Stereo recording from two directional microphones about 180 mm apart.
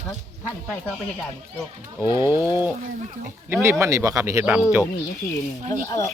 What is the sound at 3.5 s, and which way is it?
Speech, 15° right (ahead or behind).